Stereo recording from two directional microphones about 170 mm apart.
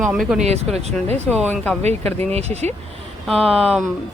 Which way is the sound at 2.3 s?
40° right (ahead or behind).